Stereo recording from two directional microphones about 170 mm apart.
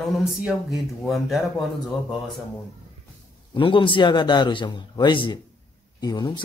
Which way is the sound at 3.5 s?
30° left (ahead or behind).